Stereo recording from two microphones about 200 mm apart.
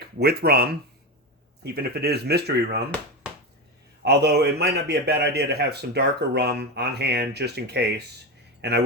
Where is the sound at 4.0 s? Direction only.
55° right (ahead or behind).